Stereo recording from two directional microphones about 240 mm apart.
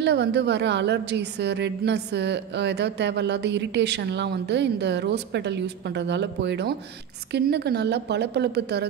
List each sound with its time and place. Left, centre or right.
0.0 s a woman's voice: right